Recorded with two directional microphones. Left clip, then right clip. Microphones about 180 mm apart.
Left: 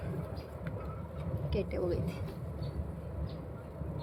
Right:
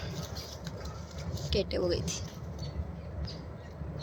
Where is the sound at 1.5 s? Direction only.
25° right (ahead or behind).